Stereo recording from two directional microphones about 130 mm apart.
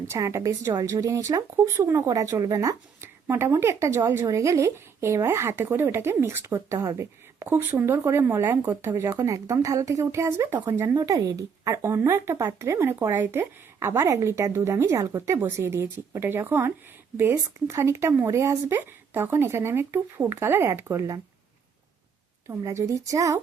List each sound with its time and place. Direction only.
0.1 s speech: 20° right (ahead or behind)
22.4 s speech: 20° right (ahead or behind)